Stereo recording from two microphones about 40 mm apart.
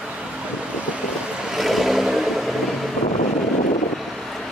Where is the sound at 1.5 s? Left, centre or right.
Centre.